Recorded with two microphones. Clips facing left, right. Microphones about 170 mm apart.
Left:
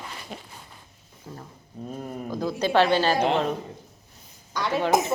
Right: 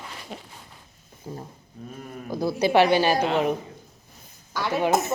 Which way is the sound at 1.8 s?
30° left (ahead or behind).